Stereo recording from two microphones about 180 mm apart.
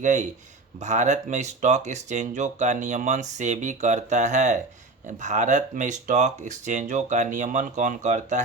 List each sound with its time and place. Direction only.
0.0 s speech: 45° right (ahead or behind)